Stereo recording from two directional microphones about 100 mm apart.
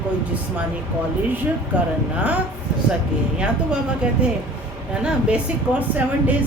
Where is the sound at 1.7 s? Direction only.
15° right (ahead or behind).